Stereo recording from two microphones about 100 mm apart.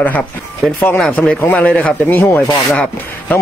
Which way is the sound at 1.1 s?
15° left (ahead or behind).